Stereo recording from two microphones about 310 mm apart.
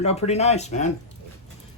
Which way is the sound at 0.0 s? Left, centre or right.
Centre.